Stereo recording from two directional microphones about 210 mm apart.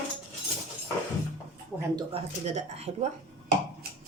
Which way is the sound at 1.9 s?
30° right (ahead or behind).